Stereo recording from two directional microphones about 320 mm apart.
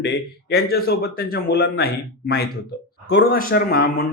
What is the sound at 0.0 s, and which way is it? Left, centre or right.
Speech, left.